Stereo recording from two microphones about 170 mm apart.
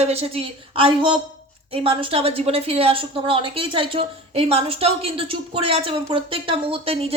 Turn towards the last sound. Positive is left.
turn(degrees=-35)  # may be behind; listen again after turning